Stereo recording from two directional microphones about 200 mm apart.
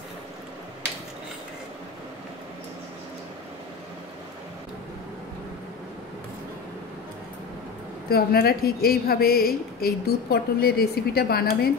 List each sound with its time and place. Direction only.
8.1 s a woman's voice: 50° left (ahead or behind)